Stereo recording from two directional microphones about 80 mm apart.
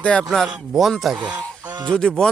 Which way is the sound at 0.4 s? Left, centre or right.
Centre.